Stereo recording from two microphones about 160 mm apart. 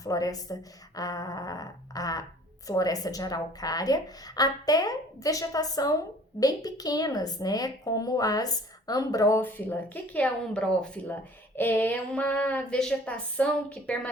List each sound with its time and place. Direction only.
0.0 s a woman's voice: 20° left (ahead or behind)